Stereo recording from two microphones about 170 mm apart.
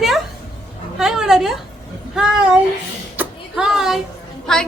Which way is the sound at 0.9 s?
5° right (ahead or behind).